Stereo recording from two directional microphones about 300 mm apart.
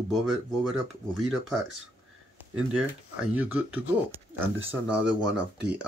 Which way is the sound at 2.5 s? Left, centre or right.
Centre.